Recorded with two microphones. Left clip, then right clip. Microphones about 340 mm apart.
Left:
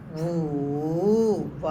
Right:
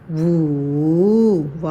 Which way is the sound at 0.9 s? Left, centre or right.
Right.